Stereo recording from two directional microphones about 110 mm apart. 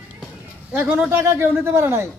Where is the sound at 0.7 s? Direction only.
15° right (ahead or behind).